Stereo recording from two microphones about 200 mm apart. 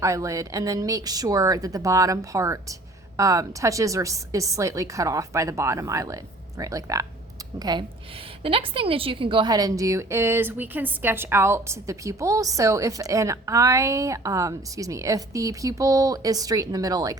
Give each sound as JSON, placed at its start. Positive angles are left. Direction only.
{"t": 0.0, "sound": "a woman's voice", "side_deg": -15}